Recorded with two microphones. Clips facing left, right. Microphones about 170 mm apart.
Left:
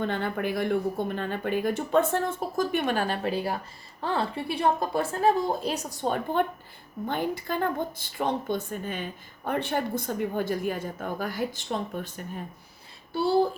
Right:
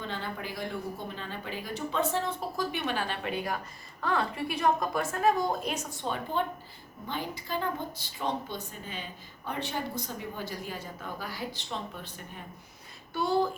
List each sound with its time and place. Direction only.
0.0 s a woman's voice: 55° left (ahead or behind); by 6.1 s 40° left (ahead or behind)
6.4 s a woman's voice: 55° left (ahead or behind)
13.1 s a woman's voice: 30° left (ahead or behind)